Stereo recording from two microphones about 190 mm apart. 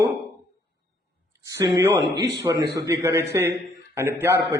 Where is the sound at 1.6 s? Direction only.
15° right (ahead or behind).